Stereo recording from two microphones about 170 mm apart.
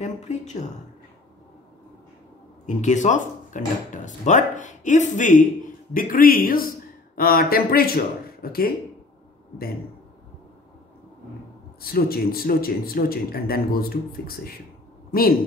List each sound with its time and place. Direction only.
0.0 s speech: 45° left (ahead or behind)
2.6 s a man's voice: 45° left (ahead or behind); by 8.7 s 60° left (ahead or behind)
11.8 s a man's voice: 60° left (ahead or behind)